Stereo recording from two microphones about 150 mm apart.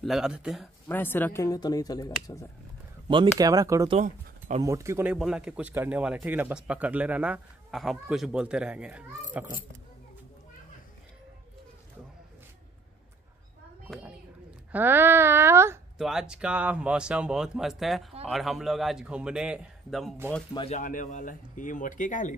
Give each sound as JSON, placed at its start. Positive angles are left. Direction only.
{"t": 0.0, "sound": "speech", "side_deg": 0}
{"t": 0.8, "sound": "speech", "side_deg": 15}
{"t": 3.1, "sound": "speech", "side_deg": -30}
{"t": 4.0, "sound": "speech", "side_deg": -50}
{"t": 4.6, "sound": "speech", "side_deg": -20}
{"t": 5.0, "sound": "speech", "side_deg": -5}
{"t": 14.7, "sound": "speech", "side_deg": -15}
{"t": 16.0, "sound": "speech", "side_deg": -5}
{"t": 20.7, "sound": "speech", "side_deg": 60}